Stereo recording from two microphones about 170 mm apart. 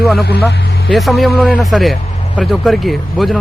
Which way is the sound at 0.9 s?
Centre (ahead or behind).